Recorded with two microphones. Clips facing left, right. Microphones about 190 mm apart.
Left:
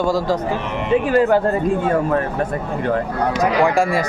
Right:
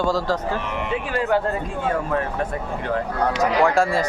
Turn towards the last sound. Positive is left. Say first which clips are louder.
# left 2 dB
turn(degrees=10)  # may be behind; listen again after turning